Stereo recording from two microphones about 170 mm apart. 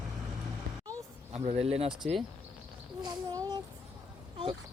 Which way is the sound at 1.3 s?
40° right (ahead or behind).